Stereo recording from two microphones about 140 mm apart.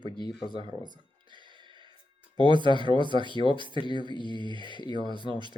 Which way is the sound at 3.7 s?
35° left (ahead or behind).